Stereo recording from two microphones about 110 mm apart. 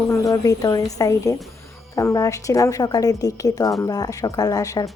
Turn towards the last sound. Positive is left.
turn(degrees=35)  # may be behind; listen again after turning